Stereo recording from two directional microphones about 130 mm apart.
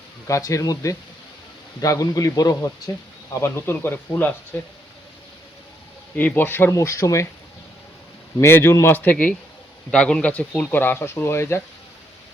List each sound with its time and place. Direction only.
0.3 s speech: 25° left (ahead or behind)
6.1 s speech: 15° left (ahead or behind)
8.4 s speech: 20° left (ahead or behind)